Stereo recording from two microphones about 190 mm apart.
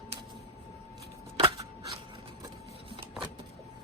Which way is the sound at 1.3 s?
30° right (ahead or behind).